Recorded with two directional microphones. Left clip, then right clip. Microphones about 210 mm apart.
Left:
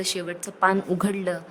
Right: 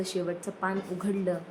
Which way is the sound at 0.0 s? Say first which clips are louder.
Left 3 dB; 45° left (ahead or behind).